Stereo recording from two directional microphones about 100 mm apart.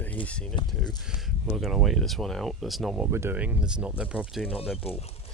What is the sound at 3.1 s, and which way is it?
Speech, 25° right (ahead or behind).